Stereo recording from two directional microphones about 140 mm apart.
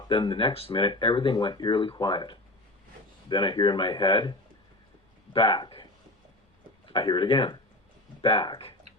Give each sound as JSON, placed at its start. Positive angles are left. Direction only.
{"t": 0.1, "sound": "speech", "side_deg": 35}